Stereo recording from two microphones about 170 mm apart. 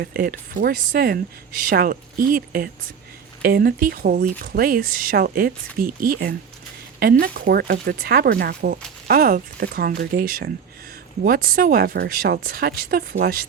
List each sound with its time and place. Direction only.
0.0 s speech: 65° right (ahead or behind)